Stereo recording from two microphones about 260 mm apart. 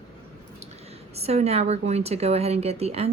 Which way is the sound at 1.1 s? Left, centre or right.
Right.